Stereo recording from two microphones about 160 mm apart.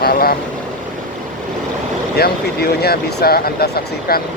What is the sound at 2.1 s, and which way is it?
Speech, 75° left (ahead or behind).